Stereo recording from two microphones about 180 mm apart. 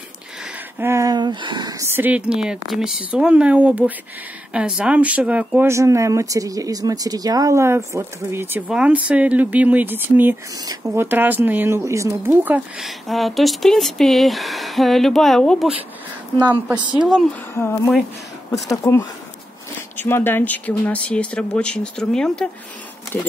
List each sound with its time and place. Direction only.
0.7 s speech: 15° right (ahead or behind); by 15.7 s centre (ahead or behind)
16.9 s speech: centre (ahead or behind)
17.6 s speech: 15° left (ahead or behind)